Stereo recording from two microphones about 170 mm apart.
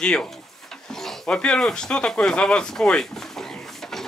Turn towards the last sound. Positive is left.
turn(degrees=5)  # may be behind; listen again after turning